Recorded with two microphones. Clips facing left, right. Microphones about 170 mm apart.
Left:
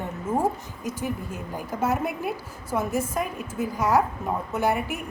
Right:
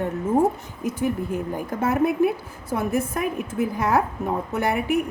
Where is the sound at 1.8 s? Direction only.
55° right (ahead or behind).